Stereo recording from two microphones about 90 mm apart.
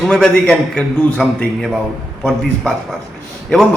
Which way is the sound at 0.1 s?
10° left (ahead or behind).